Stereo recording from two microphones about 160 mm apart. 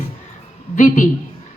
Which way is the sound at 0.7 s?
55° left (ahead or behind).